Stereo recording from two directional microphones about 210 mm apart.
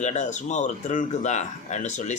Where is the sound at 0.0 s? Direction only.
35° left (ahead or behind).